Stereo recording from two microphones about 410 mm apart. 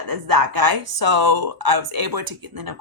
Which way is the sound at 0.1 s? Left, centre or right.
Right.